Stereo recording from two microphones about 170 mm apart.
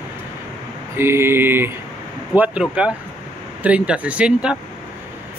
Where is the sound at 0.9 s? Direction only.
15° right (ahead or behind).